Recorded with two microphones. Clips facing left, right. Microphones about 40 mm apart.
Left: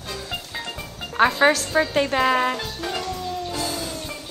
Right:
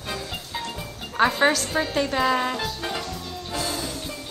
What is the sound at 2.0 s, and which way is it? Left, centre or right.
Speech, left.